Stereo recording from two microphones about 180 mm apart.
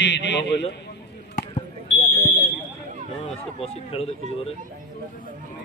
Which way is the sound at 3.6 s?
35° left (ahead or behind).